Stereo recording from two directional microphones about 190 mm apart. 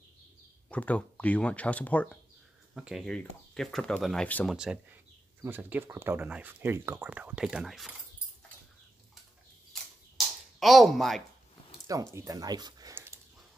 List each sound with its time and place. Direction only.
0.7 s speech: 5° left (ahead or behind)
2.7 s speech: 5° right (ahead or behind)
5.4 s speech: 10° right (ahead or behind)
9.7 s a sound: centre (ahead or behind)
11.9 s speech: 15° right (ahead or behind)